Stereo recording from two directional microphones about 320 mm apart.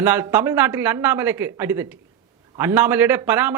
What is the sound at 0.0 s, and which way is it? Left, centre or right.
A man's voice, centre.